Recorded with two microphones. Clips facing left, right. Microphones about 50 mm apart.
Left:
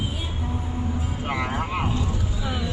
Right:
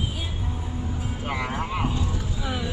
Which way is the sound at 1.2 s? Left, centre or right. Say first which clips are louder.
Left 1 dB; centre.